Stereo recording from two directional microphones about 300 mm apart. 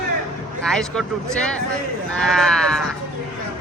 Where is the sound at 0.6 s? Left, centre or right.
Centre.